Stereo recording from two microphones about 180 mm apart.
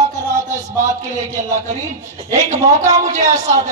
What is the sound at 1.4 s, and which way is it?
A man's voice, 40° right (ahead or behind).